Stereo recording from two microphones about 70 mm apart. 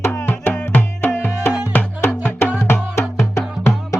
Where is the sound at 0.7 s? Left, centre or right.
Left.